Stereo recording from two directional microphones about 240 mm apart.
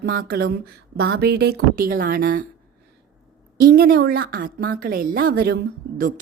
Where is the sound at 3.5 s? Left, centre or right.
Right.